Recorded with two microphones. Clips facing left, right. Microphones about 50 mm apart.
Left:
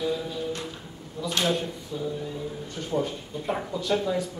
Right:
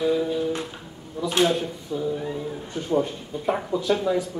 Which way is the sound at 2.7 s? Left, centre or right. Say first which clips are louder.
Right 5 dB; centre.